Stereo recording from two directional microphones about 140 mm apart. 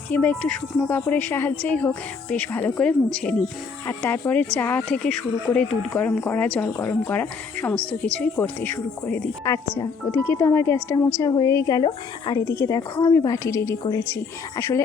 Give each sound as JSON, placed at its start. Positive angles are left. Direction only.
{"t": 0.1, "sound": "speech", "side_deg": 10}
{"t": 9.4, "sound": "speech", "side_deg": 20}
{"t": 12.5, "sound": "speech", "side_deg": 20}